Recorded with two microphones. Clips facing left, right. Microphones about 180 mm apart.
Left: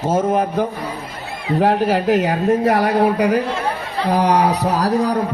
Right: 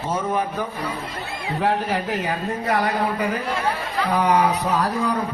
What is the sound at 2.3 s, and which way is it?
Speech, 45° left (ahead or behind).